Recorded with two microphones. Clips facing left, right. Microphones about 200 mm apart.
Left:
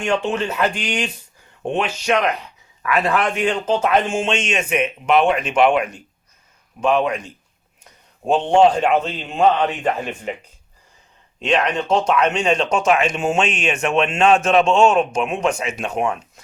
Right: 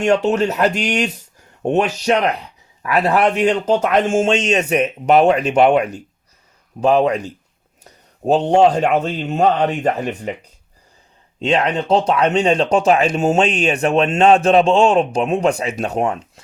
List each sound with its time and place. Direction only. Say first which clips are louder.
0.0 s speech: right 5 dB; 40° right (ahead or behind)
11.3 s speech: right 2 dB; 30° right (ahead or behind)